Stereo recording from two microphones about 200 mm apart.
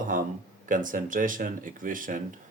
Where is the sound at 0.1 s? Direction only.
45° right (ahead or behind).